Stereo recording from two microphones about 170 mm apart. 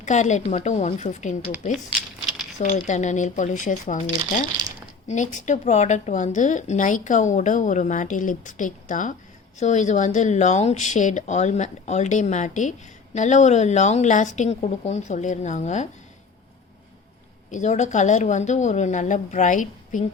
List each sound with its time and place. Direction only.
0.0 s speech: 45° left (ahead or behind)
2.6 s speech: 45° left (ahead or behind)
17.5 s speech: 45° left (ahead or behind)